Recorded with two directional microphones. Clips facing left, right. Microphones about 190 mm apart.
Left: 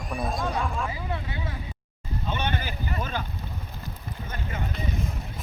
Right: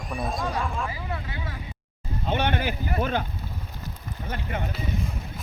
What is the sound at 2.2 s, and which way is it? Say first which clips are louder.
Speech: right 5 dB; 60° right (ahead or behind).